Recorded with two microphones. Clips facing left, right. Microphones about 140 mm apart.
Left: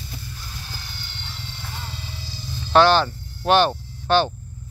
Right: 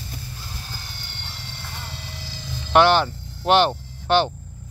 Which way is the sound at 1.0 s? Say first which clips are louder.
Left 1 dB; 60° right (ahead or behind).